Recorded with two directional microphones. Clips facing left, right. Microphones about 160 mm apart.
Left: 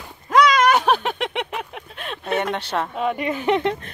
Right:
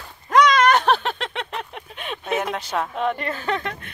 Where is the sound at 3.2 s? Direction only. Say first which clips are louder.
Left 6 dB; 15° left (ahead or behind).